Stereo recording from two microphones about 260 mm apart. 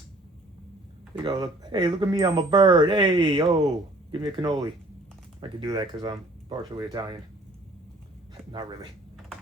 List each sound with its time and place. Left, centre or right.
1.1 s speech: centre